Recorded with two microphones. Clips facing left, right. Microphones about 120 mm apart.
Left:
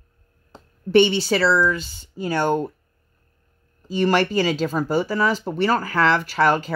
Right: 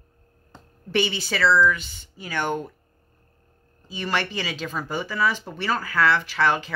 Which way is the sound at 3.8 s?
40° left (ahead or behind).